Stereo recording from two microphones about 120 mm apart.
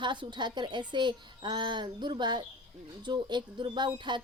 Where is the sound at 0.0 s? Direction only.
40° right (ahead or behind).